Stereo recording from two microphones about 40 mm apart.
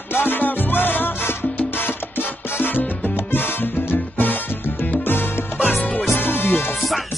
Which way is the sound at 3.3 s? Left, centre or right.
Left.